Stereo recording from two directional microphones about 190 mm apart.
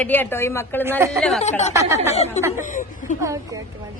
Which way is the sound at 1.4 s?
35° left (ahead or behind).